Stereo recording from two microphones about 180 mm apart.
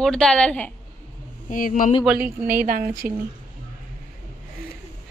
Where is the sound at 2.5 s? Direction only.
50° right (ahead or behind).